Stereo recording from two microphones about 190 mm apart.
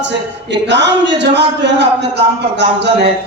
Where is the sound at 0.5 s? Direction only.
65° right (ahead or behind).